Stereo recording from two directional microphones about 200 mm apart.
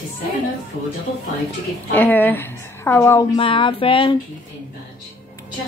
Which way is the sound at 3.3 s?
25° left (ahead or behind).